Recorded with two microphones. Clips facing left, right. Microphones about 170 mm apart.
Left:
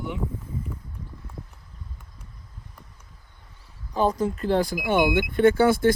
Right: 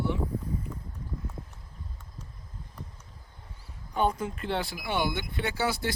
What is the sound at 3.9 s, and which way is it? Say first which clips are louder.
Speech: left 5 dB; 35° left (ahead or behind).